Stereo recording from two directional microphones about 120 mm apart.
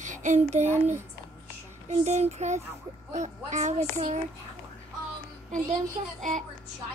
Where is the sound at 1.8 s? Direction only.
75° right (ahead or behind).